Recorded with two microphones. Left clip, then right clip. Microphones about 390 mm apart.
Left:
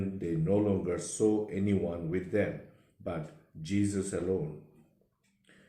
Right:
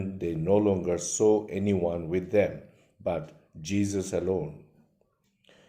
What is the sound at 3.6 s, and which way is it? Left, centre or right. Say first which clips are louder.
Speech: right 3 dB; right.